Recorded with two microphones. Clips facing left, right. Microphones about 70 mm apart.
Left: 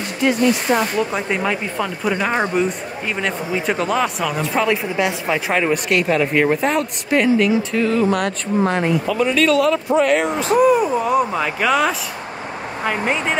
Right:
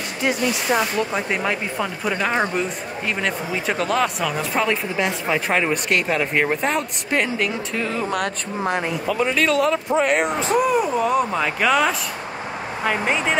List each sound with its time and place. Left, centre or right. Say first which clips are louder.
0.9 s speech: left 2 dB; centre
9.1 s speech: left 2 dB; right
10.5 s speech: left 6 dB; centre